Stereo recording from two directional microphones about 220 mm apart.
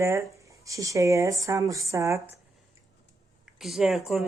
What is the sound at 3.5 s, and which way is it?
Speech, centre (ahead or behind).